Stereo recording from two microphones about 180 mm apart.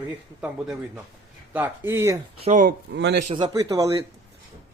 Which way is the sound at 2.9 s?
75° right (ahead or behind).